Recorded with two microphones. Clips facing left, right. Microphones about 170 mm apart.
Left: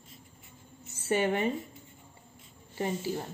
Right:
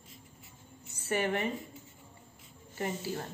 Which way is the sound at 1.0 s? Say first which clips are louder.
Left 3 dB; 25° left (ahead or behind).